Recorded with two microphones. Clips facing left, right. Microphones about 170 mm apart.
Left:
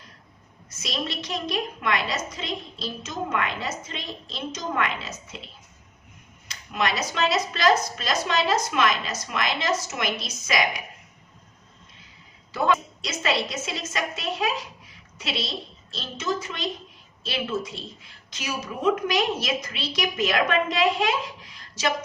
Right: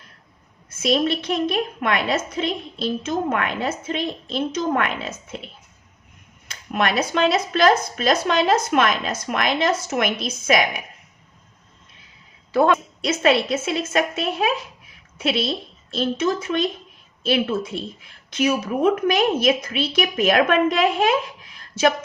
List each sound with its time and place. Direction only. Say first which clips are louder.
0.7 s a woman's voice: right 11 dB; 55° right (ahead or behind)
6.5 s a woman's voice: right 5 dB; 55° right (ahead or behind)
12.5 s a woman's voice: right 6 dB; 60° right (ahead or behind)